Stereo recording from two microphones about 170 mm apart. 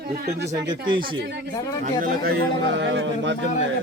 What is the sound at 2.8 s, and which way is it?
Speech, 90° right.